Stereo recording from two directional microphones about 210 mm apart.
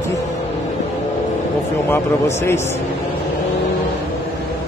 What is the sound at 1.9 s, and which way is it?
Speech, 10° left (ahead or behind).